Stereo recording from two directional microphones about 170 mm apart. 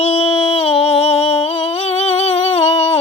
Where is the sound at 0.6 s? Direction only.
35° left (ahead or behind).